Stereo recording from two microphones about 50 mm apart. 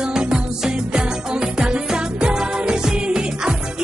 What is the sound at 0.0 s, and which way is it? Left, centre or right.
Music, centre.